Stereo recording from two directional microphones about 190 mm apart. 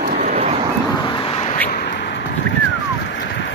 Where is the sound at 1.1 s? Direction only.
25° left (ahead or behind).